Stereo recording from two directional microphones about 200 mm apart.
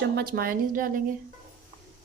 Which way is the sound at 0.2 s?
50° right (ahead or behind).